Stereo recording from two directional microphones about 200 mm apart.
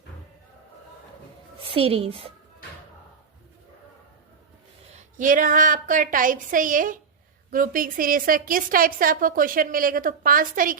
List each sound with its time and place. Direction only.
1.5 s a woman's voice: 30° right (ahead or behind)
4.9 s a woman's voice: 35° right (ahead or behind)